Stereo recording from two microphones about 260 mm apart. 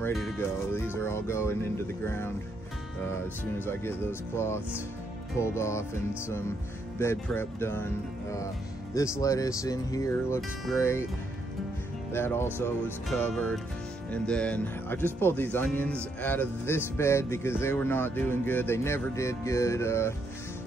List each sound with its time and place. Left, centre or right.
0.0 s speech: centre
12.1 s speech: centre